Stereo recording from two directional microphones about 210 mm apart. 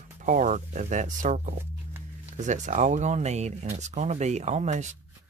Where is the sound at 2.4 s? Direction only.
35° right (ahead or behind).